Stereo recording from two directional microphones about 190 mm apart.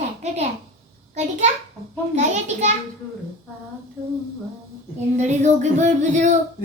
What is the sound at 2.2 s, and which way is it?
Speech, 35° right (ahead or behind).